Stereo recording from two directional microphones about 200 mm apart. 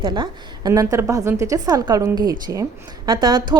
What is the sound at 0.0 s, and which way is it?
A woman's voice, 20° right (ahead or behind).